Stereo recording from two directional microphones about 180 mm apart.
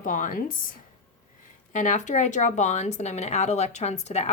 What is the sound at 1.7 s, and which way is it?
Speech, 40° left (ahead or behind).